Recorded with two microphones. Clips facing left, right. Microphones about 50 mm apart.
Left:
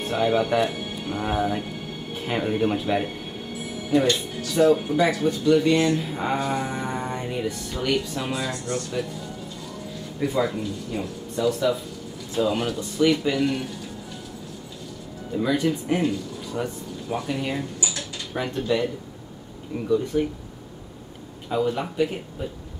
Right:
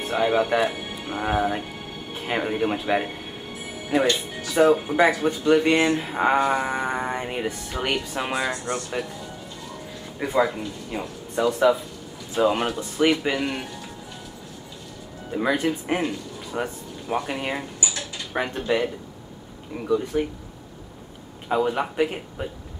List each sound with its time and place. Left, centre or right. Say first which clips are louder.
0.0 s speech: right 1 dB; centre; by 6.4 s right
6.4 s speech: right 4 dB; right
10.1 s speech: right 2 dB; right
11.4 s speech: right 3 dB; right
15.3 s speech: even; right
17.8 s typing: right 1 dB; centre
18.3 s speech: right 2 dB; right
19.7 s speech: left 1 dB; centre
21.5 s speech: right 2 dB; right